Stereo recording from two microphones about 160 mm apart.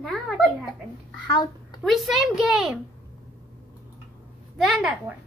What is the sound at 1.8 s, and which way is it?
A woman's voice, centre (ahead or behind).